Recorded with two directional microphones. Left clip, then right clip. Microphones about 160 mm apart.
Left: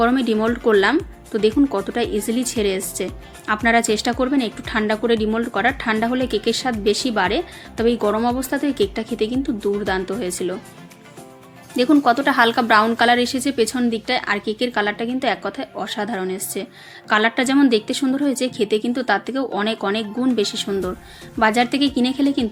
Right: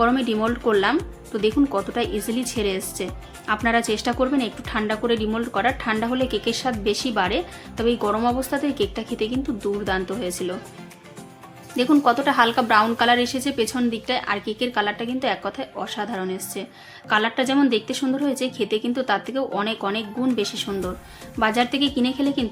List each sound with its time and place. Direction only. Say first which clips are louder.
0.0 s speech: left 2 dB; 25° left (ahead or behind)
11.8 s a woman's voice: left 3 dB; 25° left (ahead or behind)